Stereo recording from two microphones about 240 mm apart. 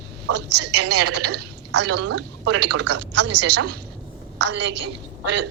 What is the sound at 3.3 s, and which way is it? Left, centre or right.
Speech, right.